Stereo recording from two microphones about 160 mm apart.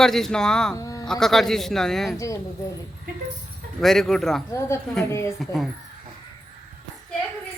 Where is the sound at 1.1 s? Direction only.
Centre (ahead or behind).